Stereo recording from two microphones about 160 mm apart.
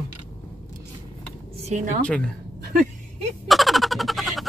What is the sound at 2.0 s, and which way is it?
Speech, 5° left (ahead or behind).